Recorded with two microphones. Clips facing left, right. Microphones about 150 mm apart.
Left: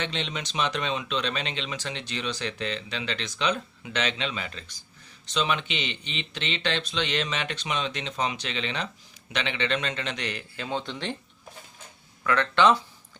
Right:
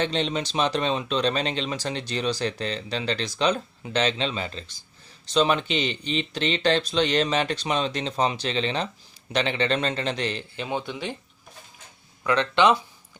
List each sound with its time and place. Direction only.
0.0 s speech: 35° right (ahead or behind)
10.6 s speech: 15° right (ahead or behind)
12.2 s speech: 20° right (ahead or behind)